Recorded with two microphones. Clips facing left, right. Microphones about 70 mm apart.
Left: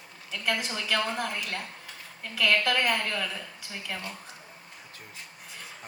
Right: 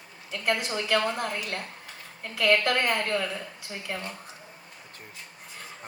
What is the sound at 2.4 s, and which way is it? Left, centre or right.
Speech, right.